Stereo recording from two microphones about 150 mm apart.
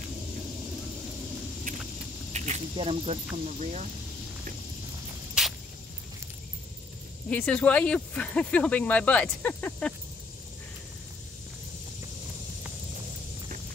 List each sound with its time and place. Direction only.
2.3 s snake: 50° right (ahead or behind)
2.7 s speech: 40° right (ahead or behind)
5.4 s a sound: 5° right (ahead or behind)
7.2 s speech: 10° left (ahead or behind)